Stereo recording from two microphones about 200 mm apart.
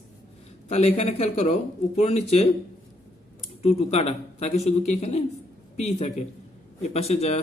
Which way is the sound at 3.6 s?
30° left (ahead or behind).